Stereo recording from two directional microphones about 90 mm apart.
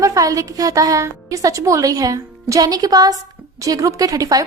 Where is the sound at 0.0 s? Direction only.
40° right (ahead or behind).